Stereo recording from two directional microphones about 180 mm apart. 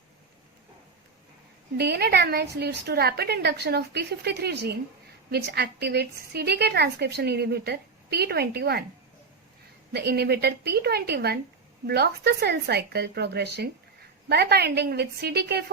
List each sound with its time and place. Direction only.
1.8 s a woman's voice: 65° right (ahead or behind)
9.9 s a woman's voice: 65° right (ahead or behind)